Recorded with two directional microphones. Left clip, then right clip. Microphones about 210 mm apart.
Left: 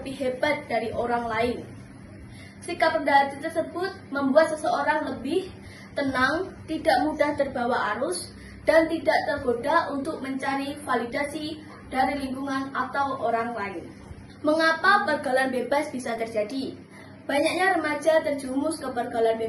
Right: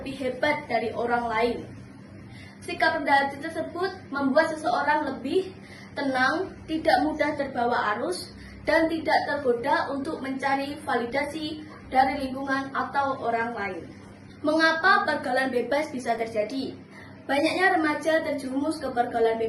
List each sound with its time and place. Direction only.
0.0 s a woman's voice: centre (ahead or behind)
2.6 s a woman's voice: centre (ahead or behind)